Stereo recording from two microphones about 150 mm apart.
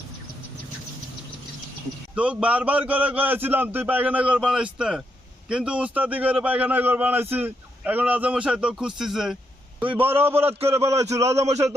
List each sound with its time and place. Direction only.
2.1 s a man's voice: 10° right (ahead or behind)
10.2 s a man's voice: 15° right (ahead or behind)
11.2 s a man's voice: 45° right (ahead or behind)